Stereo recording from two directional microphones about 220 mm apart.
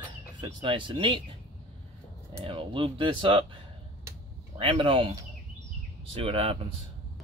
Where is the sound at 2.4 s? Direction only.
25° right (ahead or behind).